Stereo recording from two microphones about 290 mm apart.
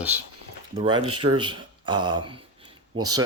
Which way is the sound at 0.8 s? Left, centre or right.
Centre.